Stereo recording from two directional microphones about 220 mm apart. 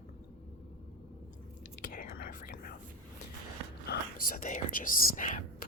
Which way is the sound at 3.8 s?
40° left (ahead or behind).